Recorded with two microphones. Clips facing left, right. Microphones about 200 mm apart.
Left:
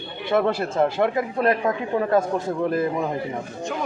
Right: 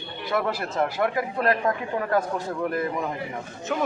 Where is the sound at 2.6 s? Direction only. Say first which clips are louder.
Left 4 dB; 30° left (ahead or behind).